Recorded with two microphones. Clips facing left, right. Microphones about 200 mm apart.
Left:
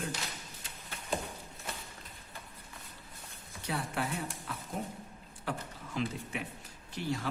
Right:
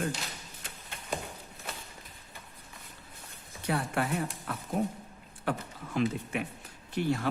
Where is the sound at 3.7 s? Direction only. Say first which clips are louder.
Right 5 dB; 60° right (ahead or behind).